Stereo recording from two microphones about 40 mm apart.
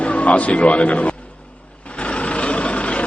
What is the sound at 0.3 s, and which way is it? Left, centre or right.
Speech, left.